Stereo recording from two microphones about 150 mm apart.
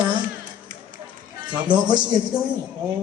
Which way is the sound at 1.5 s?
30° right (ahead or behind).